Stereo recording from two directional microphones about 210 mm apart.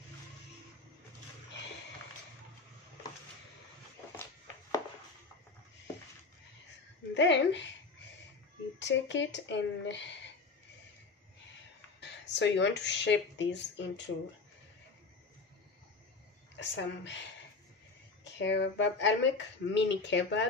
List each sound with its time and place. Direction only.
7.2 s speech: 55° left (ahead or behind)
8.7 s speech: 55° left (ahead or behind)
12.1 s speech: 55° left (ahead or behind)
16.5 s speech: 60° left (ahead or behind)
18.2 s speech: 60° left (ahead or behind)